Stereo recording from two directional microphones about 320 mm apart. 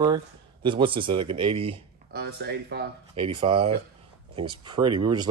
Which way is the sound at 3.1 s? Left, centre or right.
Centre.